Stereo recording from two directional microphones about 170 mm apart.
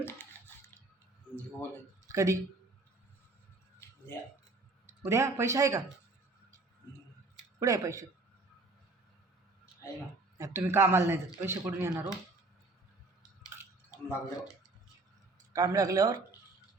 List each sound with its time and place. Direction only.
0.0 s a sound: 10° left (ahead or behind)
2.0 s speech: 20° right (ahead or behind)
3.8 s a sound: 15° left (ahead or behind)
5.0 s a man's voice: 15° right (ahead or behind)
7.6 s speech: 20° right (ahead or behind)
10.3 s a man's voice: 15° right (ahead or behind)
13.9 s speech: 20° left (ahead or behind)
15.5 s speech: 20° right (ahead or behind)